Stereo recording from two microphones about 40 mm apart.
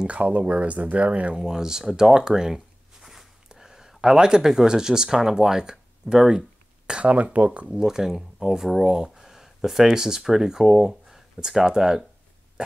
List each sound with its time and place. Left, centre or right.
0.0 s speech: right
1.4 s speech: centre
3.4 s a sound: centre
4.0 s speech: centre
6.9 s speech: right
7.6 s speech: centre
8.9 s speech: centre
12.6 s hiccup: right